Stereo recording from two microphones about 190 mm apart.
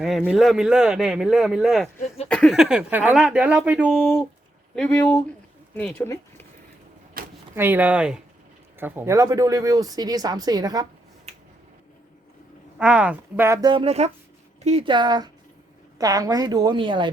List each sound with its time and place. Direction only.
0.3 s speech: centre (ahead or behind)
7.2 s a sound: 50° right (ahead or behind)
7.5 s speech: 10° right (ahead or behind)
12.8 s speech: 5° right (ahead or behind); by 17.1 s 25° right (ahead or behind)